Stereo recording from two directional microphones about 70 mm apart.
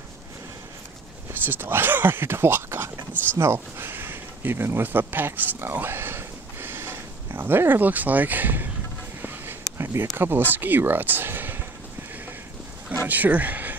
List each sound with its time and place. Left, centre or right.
1.3 s speech: right
9.2 s a sound: right
9.7 s speech: right
13.0 s speech: right